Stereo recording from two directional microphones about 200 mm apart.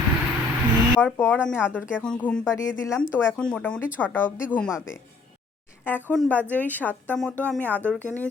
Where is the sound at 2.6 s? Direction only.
15° left (ahead or behind).